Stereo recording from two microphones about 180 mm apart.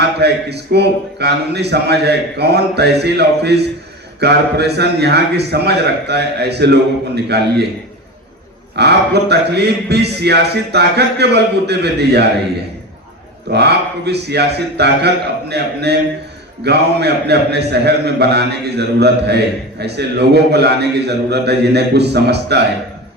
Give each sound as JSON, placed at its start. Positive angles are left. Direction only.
{"t": 0.0, "sound": "a man's voice", "side_deg": -65}
{"t": 8.7, "sound": "speech", "side_deg": -65}
{"t": 13.5, "sound": "a man's voice", "side_deg": -65}